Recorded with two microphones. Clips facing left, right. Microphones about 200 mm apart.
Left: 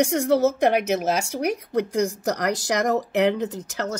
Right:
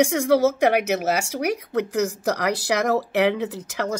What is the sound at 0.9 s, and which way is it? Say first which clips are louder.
Speech: even; 5° right (ahead or behind).